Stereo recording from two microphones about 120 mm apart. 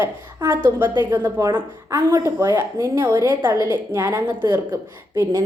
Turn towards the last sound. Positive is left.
turn(degrees=-30)  # may be behind; listen again after turning